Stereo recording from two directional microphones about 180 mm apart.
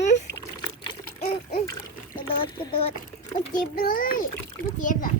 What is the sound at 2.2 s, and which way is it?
Speech, 30° left (ahead or behind).